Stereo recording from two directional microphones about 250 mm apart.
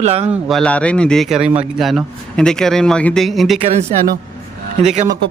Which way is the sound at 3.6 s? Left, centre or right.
Right.